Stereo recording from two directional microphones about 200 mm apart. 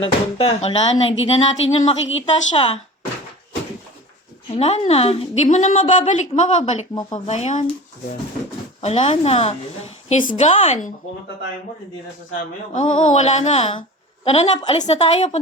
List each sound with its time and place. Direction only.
0.0 s speech: 30° left (ahead or behind)
4.5 s a woman's voice: 30° left (ahead or behind)
8.8 s a woman's voice: 35° left (ahead or behind)
12.7 s a woman's voice: 40° left (ahead or behind)